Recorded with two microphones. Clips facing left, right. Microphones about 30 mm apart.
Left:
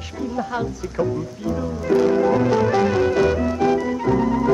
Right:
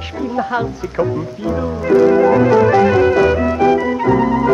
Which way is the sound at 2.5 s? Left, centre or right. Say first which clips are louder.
Right 7 dB; centre.